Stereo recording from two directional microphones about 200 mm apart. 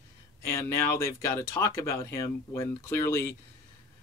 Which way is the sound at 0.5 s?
15° left (ahead or behind).